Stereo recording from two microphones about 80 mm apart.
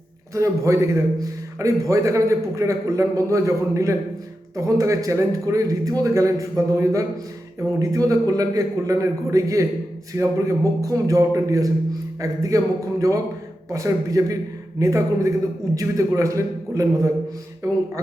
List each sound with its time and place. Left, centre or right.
0.3 s a man's voice: right
10.8 s a man's voice: right